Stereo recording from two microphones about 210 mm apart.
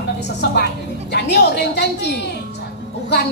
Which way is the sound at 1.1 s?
50° left (ahead or behind).